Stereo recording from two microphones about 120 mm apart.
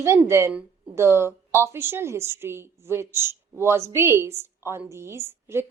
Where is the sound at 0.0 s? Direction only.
20° right (ahead or behind).